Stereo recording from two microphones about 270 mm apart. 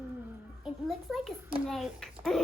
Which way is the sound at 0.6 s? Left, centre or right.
Centre.